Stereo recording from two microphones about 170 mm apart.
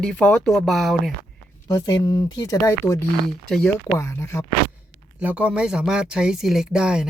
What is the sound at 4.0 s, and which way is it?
Speech, 15° left (ahead or behind).